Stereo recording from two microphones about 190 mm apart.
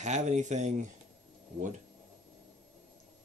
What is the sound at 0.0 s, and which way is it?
Speech, 40° right (ahead or behind).